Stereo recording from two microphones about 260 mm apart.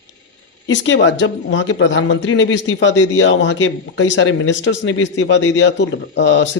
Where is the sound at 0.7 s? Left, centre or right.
Left.